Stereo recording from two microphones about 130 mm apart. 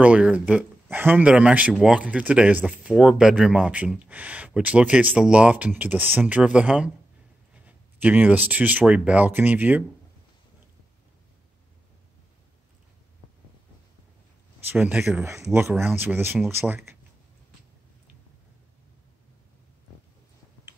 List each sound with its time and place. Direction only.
0.0 s speech: 10° right (ahead or behind)
14.7 s speech: 10° right (ahead or behind)
15.4 s speech: 20° right (ahead or behind)